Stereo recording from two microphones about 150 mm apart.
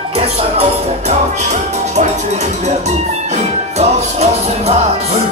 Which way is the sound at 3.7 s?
45° right (ahead or behind).